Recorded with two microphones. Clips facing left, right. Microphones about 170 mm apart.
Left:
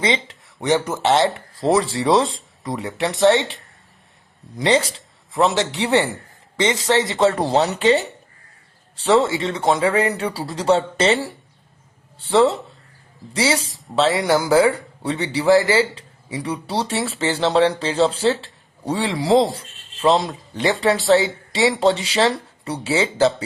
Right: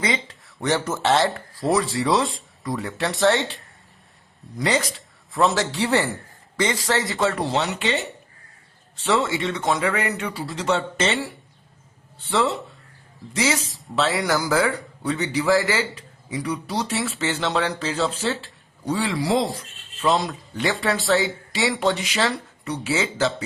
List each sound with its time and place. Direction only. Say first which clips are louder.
0.0 s speech: left 4 dB; 20° left (ahead or behind)
7.3 s speech: left 5 dB; 35° left (ahead or behind)
9.0 s speech: left 5 dB; 30° left (ahead or behind)
11.1 s speech: left 6 dB; centre (ahead or behind)
13.3 s speech: left 3 dB; 30° left (ahead or behind)
19.2 s speech: left 8 dB; centre (ahead or behind)
19.5 s rub: even; 30° left (ahead or behind)
20.7 s speech: left 5 dB; centre (ahead or behind)
21.2 s speech: left 4 dB; 20° left (ahead or behind)